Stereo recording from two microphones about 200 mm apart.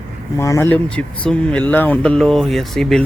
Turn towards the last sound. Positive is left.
turn(degrees=0)  # may be behind; listen again after turning